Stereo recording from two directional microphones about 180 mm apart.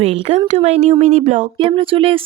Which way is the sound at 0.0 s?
35° right (ahead or behind).